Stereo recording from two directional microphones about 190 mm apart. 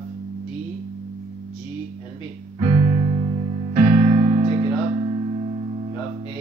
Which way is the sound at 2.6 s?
25° right (ahead or behind).